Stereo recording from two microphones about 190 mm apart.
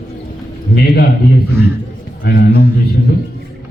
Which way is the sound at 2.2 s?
55° left (ahead or behind).